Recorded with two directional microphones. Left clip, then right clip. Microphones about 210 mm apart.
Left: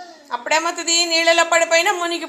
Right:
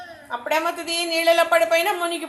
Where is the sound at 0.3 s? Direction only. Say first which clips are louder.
Left 3 dB; centre (ahead or behind).